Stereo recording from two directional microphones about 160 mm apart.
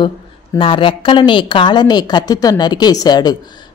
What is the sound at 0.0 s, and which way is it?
A woman's voice, 30° left (ahead or behind).